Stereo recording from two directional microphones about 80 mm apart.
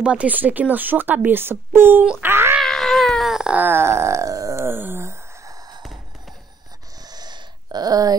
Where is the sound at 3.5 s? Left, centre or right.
Right.